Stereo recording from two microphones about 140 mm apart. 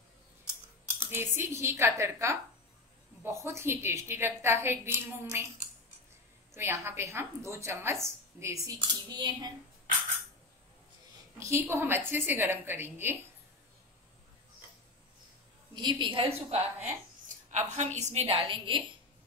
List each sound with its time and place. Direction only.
0.9 s a woman's voice: 15° right (ahead or behind)
6.5 s a woman's voice: 15° right (ahead or behind)
8.7 s speech: 30° right (ahead or behind)
11.3 s a woman's voice: 20° right (ahead or behind)
15.7 s speech: 35° right (ahead or behind)
16.4 s a woman's voice: 55° right (ahead or behind); by 18.8 s 40° right (ahead or behind)